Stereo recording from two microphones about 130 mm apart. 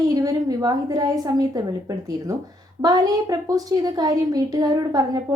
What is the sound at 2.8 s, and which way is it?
A woman's voice, 30° right (ahead or behind).